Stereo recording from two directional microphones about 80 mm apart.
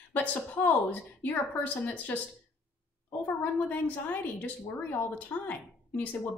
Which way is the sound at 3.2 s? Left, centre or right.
Left.